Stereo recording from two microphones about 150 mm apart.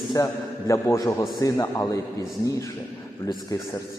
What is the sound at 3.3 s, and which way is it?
Speech, 20° left (ahead or behind).